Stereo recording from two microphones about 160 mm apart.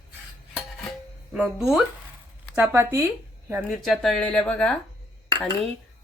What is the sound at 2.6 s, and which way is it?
Speech, 15° right (ahead or behind).